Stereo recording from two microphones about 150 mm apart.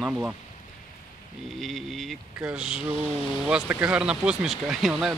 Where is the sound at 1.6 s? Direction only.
Centre (ahead or behind).